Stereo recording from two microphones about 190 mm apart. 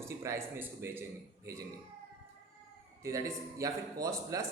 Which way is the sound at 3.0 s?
15° right (ahead or behind).